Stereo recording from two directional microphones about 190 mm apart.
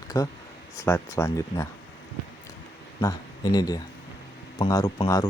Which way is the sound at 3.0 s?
20° left (ahead or behind).